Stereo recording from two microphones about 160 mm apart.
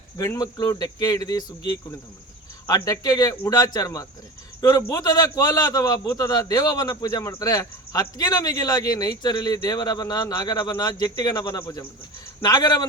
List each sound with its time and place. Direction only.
0.2 s a man's voice: 20° left (ahead or behind)
2.6 s a man's voice: 20° left (ahead or behind)